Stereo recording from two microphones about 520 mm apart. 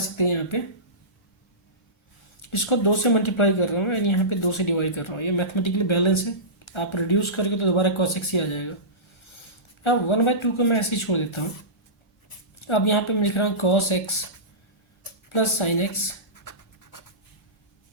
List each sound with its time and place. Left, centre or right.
0.2 s speech: left
2.4 s speech: left
9.8 s speech: left
12.5 s speech: left
15.3 s speech: left
16.3 s a sound: left